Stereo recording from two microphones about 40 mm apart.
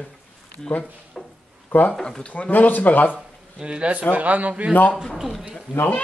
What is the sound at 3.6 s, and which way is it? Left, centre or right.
Speech, right.